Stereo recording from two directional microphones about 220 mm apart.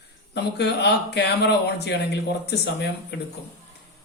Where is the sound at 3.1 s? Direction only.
50° left (ahead or behind).